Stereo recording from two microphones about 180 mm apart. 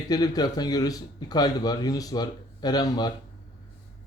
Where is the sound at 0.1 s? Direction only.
20° left (ahead or behind).